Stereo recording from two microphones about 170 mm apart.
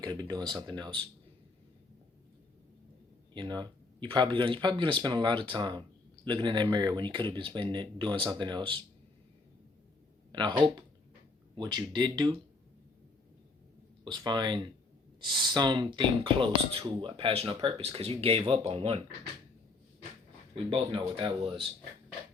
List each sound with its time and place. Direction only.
0.0 s speech: 25° right (ahead or behind)
3.3 s speech: 25° right (ahead or behind)
10.3 s speech: 30° right (ahead or behind)
14.0 s speech: 25° right (ahead or behind)
20.7 s speech: 30° right (ahead or behind)